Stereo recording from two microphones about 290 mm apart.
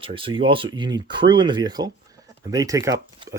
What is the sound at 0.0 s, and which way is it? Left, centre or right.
Speech, centre.